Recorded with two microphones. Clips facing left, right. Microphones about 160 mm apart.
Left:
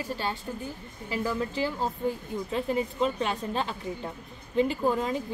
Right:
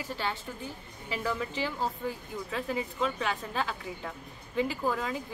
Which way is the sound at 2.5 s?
20° left (ahead or behind).